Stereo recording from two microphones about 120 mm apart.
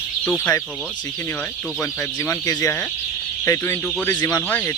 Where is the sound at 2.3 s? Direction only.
25° left (ahead or behind).